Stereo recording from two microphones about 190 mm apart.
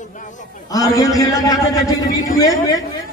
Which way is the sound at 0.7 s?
20° left (ahead or behind).